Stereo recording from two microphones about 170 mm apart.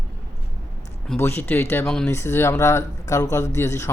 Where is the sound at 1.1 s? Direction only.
15° left (ahead or behind).